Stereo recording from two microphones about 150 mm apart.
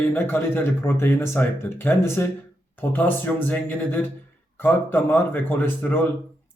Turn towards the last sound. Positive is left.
turn(degrees=15)  # may be behind; listen again after turning